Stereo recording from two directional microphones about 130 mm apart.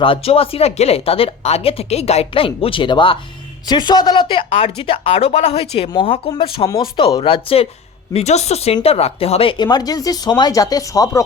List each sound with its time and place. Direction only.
0.0 s speech: 45° left (ahead or behind)
8.1 s speech: 55° left (ahead or behind); by 11.2 s 25° left (ahead or behind)